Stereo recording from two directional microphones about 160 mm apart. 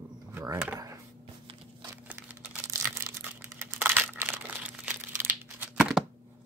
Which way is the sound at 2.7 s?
20° right (ahead or behind).